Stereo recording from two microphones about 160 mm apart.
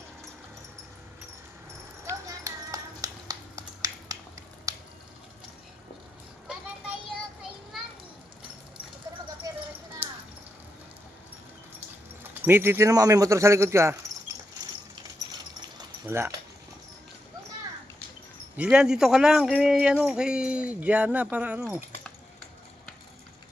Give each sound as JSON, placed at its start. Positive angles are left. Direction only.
{"t": 2.0, "sound": "a sound", "side_deg": -20}
{"t": 12.2, "sound": "speech", "side_deg": -15}
{"t": 16.0, "sound": "speech", "side_deg": -15}
{"t": 18.5, "sound": "speech", "side_deg": -5}